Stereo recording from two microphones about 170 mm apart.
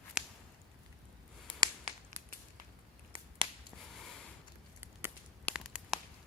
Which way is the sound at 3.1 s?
30° right (ahead or behind).